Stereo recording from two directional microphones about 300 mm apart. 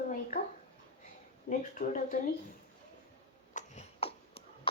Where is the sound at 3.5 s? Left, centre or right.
Left.